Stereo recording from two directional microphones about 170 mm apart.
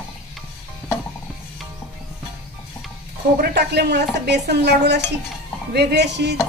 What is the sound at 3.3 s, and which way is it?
A woman's voice, 70° right (ahead or behind).